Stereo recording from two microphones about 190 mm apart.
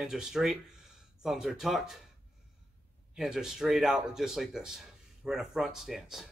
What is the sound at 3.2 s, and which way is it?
Speech, centre (ahead or behind).